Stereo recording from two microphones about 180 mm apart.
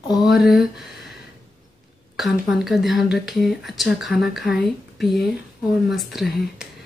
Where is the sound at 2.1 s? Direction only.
Centre (ahead or behind).